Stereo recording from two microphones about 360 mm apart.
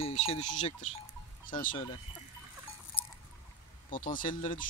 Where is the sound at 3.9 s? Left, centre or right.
Left.